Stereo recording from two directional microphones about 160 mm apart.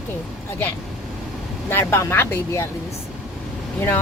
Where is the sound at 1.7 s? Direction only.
15° left (ahead or behind).